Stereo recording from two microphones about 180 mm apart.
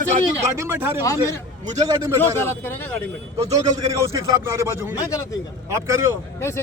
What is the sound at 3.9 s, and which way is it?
Speech, 20° right (ahead or behind).